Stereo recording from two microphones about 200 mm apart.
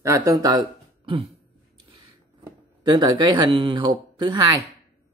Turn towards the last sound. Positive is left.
turn(degrees=-15)  # may be behind; listen again after turning